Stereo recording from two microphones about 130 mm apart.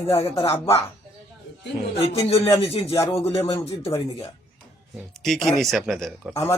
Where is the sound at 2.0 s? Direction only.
45° left (ahead or behind).